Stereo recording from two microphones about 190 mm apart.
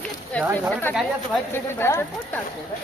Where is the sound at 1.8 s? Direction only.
10° left (ahead or behind).